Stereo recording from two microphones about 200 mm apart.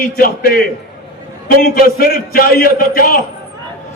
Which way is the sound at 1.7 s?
50° left (ahead or behind).